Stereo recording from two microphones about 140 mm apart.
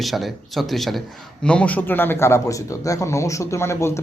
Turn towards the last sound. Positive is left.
turn(degrees=20)  # may be behind; listen again after turning